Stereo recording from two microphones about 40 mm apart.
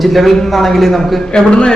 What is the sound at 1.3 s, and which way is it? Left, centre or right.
Speech, left.